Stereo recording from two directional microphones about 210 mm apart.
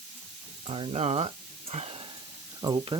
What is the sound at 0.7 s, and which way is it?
Speech, 25° right (ahead or behind).